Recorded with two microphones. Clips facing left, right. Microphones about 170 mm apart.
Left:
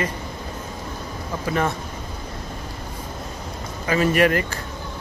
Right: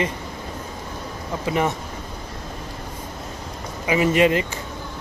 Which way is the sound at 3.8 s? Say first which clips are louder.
Right 1 dB; 15° right (ahead or behind).